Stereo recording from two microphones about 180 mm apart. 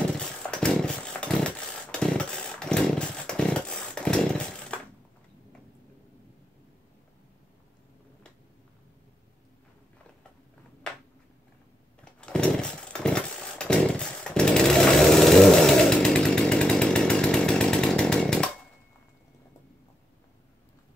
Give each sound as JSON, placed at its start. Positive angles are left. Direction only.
{"t": 0.2, "sound": "chainsaw", "side_deg": 5}
{"t": 12.0, "sound": "chainsaw", "side_deg": 5}